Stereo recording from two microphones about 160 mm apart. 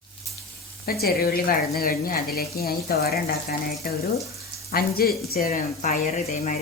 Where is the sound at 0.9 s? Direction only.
70° left (ahead or behind).